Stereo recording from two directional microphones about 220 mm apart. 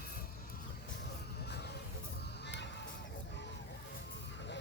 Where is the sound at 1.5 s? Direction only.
50° left (ahead or behind).